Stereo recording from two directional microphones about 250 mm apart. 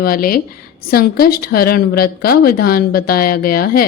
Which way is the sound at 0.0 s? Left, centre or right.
Left.